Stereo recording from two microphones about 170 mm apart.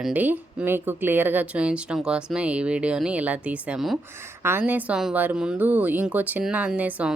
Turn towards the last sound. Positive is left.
turn(degrees=-10)  # may be behind; listen again after turning